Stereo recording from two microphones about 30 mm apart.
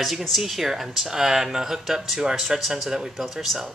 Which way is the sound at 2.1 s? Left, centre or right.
Right.